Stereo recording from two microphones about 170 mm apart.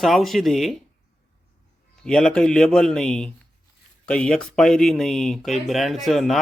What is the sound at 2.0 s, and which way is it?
Speech, 5° left (ahead or behind).